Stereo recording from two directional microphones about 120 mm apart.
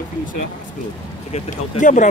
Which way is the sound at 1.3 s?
90° left.